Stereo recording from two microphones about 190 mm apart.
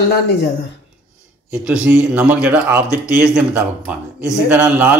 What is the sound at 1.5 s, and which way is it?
Speech, 5° right (ahead or behind).